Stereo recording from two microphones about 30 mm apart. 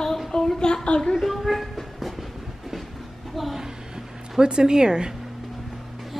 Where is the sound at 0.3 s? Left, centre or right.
Centre.